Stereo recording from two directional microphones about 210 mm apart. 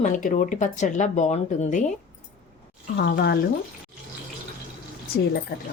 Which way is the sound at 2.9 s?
50° left (ahead or behind).